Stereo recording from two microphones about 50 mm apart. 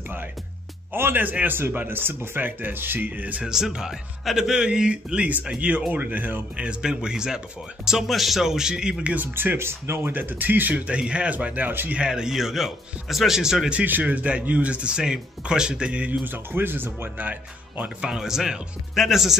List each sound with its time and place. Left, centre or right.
0.9 s speech: right
3.1 s speech: right
3.7 s a man's voice: centre
4.2 s speech: centre
4.5 s a man's voice: centre
9.0 s speech: right
9.3 s speech: right
10.1 s speech: right
10.9 s speech: right
12.1 s a man's voice: centre
13.8 s speech: right
16.3 s speech: right
17.2 s speech: right
18.1 s a man's voice: centre